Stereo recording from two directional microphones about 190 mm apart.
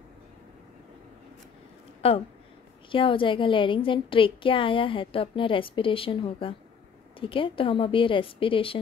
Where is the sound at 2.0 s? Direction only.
30° left (ahead or behind).